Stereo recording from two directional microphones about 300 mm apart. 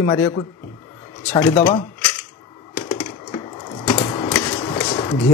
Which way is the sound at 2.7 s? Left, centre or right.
Centre.